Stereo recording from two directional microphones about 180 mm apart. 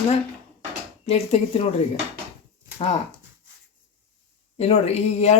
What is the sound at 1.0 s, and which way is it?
Speech, 35° left (ahead or behind).